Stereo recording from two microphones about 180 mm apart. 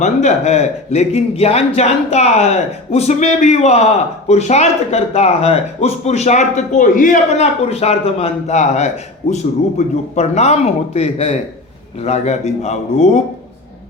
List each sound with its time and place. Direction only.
0.0 s a man's voice: 40° left (ahead or behind)